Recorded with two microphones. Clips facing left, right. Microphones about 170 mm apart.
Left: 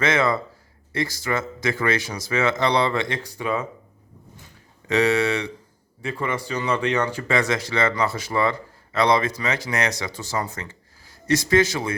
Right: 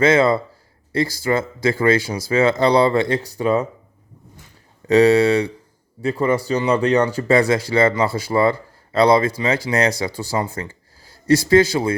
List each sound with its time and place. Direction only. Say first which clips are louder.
0.0 s speech: right 6 dB; 30° right (ahead or behind)
4.9 s a man's voice: right 7 dB; 35° right (ahead or behind)